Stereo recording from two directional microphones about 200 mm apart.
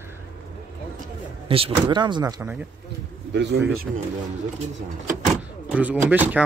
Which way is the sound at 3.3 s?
60° right (ahead or behind).